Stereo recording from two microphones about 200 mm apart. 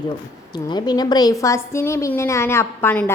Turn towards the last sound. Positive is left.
turn(degrees=10)  # may be behind; listen again after turning